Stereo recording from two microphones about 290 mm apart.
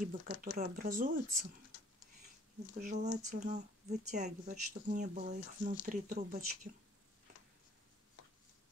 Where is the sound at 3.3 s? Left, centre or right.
Right.